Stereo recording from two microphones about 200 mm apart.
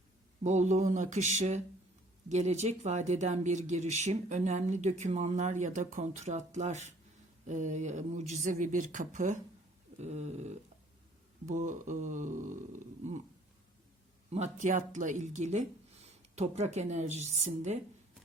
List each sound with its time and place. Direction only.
0.4 s speech: 35° right (ahead or behind)
14.3 s speech: 35° right (ahead or behind)